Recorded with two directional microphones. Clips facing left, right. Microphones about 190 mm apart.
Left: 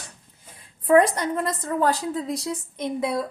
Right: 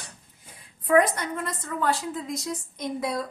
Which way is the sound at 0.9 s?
30° left (ahead or behind).